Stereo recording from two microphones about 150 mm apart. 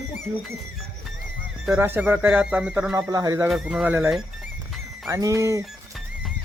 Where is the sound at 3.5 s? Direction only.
5° right (ahead or behind).